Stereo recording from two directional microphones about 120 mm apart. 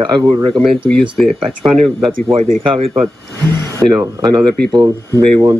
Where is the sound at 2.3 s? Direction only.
50° right (ahead or behind).